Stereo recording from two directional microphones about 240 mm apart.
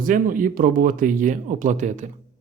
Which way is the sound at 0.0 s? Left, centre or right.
Right.